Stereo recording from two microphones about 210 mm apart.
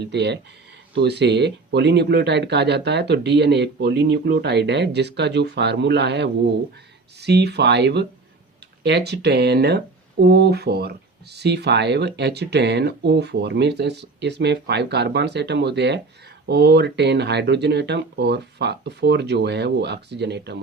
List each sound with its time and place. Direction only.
0.0 s speech: 55° right (ahead or behind)